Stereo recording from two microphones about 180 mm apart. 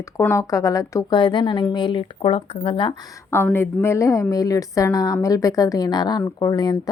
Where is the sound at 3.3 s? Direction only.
10° left (ahead or behind).